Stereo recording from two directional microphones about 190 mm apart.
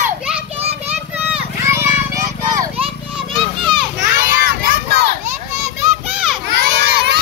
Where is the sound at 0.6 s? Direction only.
30° right (ahead or behind).